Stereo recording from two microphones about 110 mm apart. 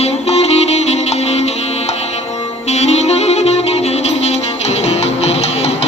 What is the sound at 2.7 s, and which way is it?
Music, 85° left.